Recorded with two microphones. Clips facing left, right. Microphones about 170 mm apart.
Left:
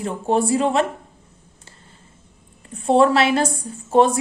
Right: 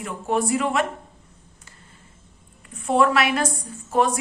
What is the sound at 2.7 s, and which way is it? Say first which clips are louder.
A woman's voice: left 4 dB; 30° left (ahead or behind).